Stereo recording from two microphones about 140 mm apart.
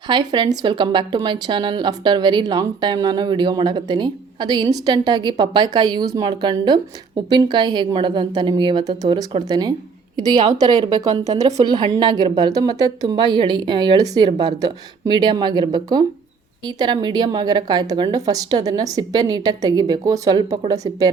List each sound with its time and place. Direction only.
0.1 s a woman's voice: 30° right (ahead or behind)